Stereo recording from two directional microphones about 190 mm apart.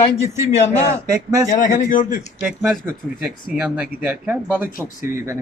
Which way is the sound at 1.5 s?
45° left (ahead or behind).